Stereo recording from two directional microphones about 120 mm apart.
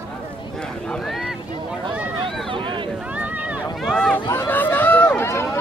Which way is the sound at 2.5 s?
45° right (ahead or behind).